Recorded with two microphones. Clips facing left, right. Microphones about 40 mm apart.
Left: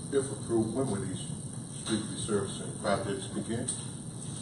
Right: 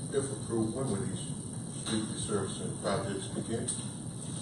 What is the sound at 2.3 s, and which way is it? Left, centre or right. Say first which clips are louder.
Speech: left 3 dB; left.